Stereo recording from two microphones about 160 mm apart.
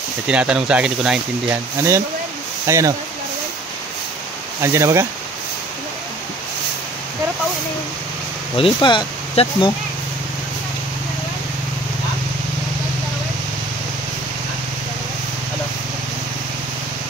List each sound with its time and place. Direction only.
0.3 s speech: 5° right (ahead or behind)
1.8 s speech: 15° right (ahead or behind)
4.6 s speech: 15° right (ahead or behind)
8.5 s speech: 30° left (ahead or behind)